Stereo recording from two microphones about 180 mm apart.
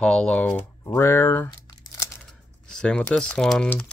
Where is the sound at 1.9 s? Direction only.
15° left (ahead or behind).